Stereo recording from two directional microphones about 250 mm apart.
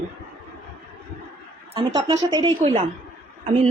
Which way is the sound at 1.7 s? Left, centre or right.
Right.